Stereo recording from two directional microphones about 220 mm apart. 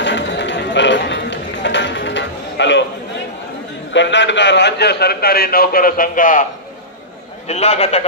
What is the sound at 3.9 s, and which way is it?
A man's voice, 55° left (ahead or behind).